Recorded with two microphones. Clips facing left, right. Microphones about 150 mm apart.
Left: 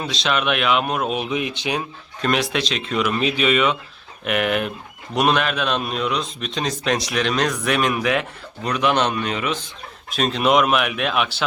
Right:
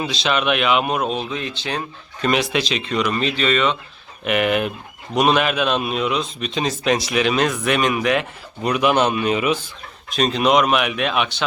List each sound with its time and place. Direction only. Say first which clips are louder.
0.0 s a man's voice: right 2 dB; centre (ahead or behind)
1.1 s speech: left 2 dB; 15° left (ahead or behind)
2.2 s a man's voice: right 2 dB; centre (ahead or behind)
10.1 s a man's voice: right 1 dB; centre (ahead or behind)